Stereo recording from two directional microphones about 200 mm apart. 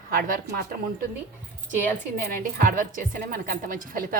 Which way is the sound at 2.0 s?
45° right (ahead or behind).